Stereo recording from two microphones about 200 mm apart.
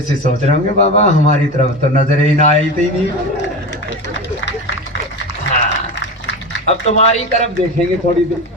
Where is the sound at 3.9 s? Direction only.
65° left (ahead or behind).